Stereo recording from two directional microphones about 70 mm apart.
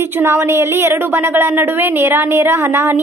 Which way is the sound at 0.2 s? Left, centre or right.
Right.